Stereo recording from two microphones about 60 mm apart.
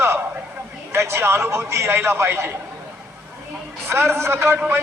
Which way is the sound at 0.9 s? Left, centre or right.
Right.